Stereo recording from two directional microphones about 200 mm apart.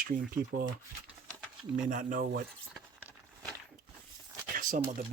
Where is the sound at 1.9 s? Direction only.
40° right (ahead or behind).